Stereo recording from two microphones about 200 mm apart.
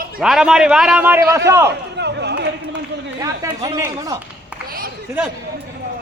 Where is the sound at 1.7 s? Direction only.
55° right (ahead or behind).